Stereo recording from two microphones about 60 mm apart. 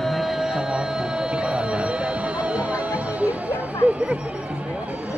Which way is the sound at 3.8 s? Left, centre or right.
Centre.